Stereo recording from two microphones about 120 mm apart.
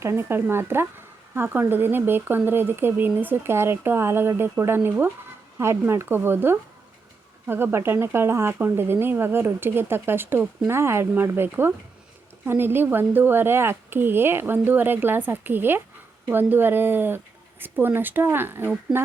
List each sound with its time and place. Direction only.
0.0 s speech: 20° right (ahead or behind)